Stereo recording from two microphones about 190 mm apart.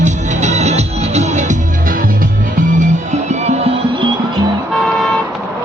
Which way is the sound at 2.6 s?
40° right (ahead or behind).